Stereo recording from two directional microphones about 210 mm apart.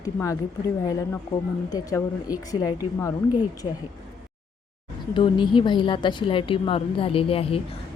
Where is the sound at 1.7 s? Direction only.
15° left (ahead or behind).